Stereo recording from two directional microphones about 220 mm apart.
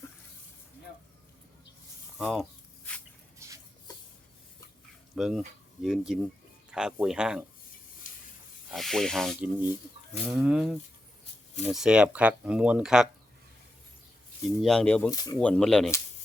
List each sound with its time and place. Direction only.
2.1 s a sound: centre (ahead or behind)
3.4 s a sound: 10° right (ahead or behind)
5.1 s speech: centre (ahead or behind)
8.1 s hiss: 40° left (ahead or behind)
8.7 s speech: centre (ahead or behind)
14.4 s speech: centre (ahead or behind)
15.1 s speech: 15° left (ahead or behind)
15.4 s speech: 5° left (ahead or behind)